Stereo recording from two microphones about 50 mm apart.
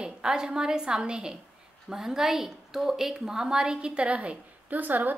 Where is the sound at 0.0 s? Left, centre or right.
Centre.